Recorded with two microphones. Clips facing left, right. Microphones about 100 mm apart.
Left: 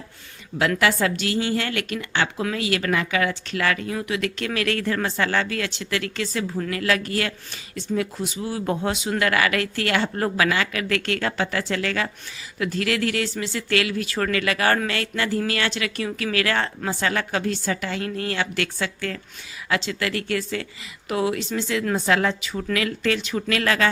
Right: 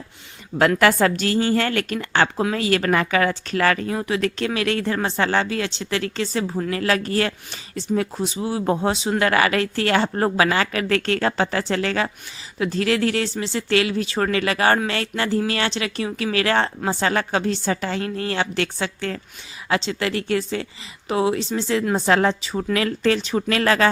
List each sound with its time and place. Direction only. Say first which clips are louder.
0.8 s a woman's voice: right 4 dB; 50° right (ahead or behind)